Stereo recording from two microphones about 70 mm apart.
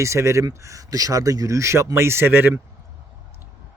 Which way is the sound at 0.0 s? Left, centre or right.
Right.